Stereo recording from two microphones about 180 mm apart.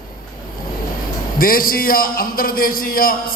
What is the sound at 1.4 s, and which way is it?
A man's voice, 50° left (ahead or behind).